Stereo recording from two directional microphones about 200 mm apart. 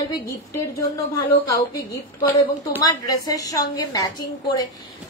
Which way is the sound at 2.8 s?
20° left (ahead or behind).